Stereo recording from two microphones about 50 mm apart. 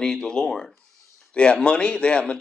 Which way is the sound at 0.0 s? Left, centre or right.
Centre.